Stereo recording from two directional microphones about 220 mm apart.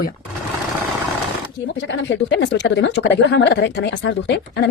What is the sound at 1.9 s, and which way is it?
A woman's voice, 55° left (ahead or behind).